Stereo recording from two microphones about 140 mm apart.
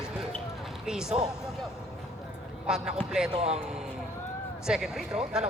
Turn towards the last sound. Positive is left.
turn(degrees=-5)  # may be behind; listen again after turning